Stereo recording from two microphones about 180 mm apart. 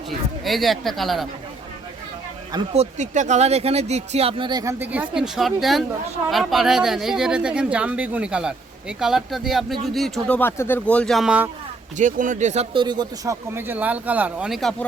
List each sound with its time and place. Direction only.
0.4 s speech: centre (ahead or behind)
2.7 s speech: 40° right (ahead or behind); by 4.7 s 25° right (ahead or behind)
4.8 s speech: 10° right (ahead or behind)
10.2 s speech: 10° left (ahead or behind); by 11.5 s 5° right (ahead or behind)
11.9 s speech: 45° right (ahead or behind)
12.7 s speech: 25° right (ahead or behind); by 14.8 s centre (ahead or behind)